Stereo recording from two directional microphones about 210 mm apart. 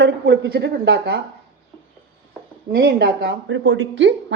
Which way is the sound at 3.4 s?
65° right (ahead or behind).